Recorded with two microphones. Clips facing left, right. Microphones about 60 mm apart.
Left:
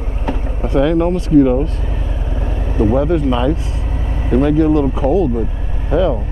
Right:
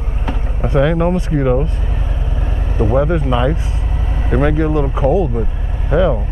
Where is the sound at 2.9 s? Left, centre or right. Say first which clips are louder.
Right 3 dB; centre.